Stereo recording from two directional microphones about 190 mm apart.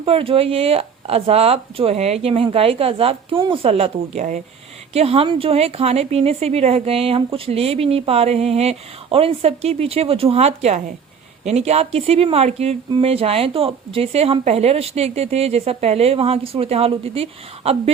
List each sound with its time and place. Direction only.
0.0 s speech: 30° right (ahead or behind)